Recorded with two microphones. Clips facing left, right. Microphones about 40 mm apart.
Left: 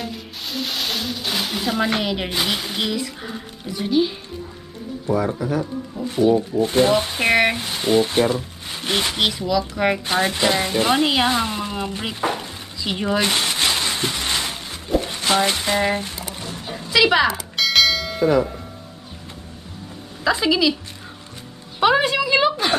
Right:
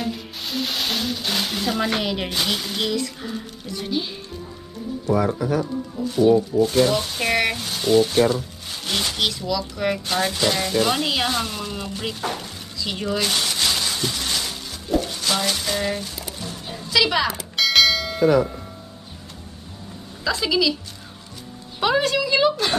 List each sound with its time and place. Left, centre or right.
0.0 s music: centre
6.6 s speech: left
16.9 s a woman's voice: centre
17.3 s bell: centre
20.2 s a woman's voice: centre
21.7 s a sound: centre